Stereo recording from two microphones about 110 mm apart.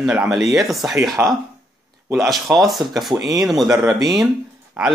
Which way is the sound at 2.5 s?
Centre (ahead or behind).